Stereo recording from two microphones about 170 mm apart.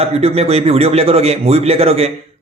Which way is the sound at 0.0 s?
35° right (ahead or behind).